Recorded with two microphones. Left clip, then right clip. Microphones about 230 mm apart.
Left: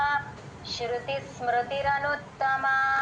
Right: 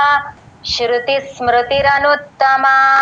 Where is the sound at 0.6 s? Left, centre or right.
Right.